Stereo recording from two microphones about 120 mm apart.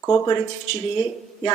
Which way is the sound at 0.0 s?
25° left (ahead or behind).